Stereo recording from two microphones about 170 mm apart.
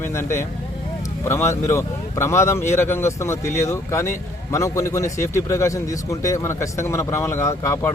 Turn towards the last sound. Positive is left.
turn(degrees=15)  # may be behind; listen again after turning